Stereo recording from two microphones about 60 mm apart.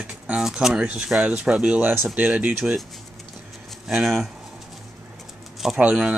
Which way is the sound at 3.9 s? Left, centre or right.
Centre.